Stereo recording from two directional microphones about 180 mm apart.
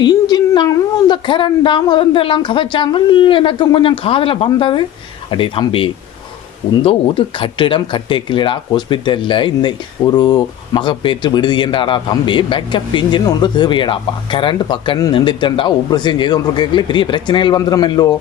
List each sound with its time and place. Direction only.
0.0 s speech: 25° left (ahead or behind)